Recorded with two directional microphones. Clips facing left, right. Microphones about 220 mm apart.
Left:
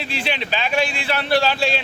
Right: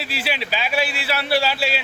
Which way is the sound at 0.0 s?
5° right (ahead or behind).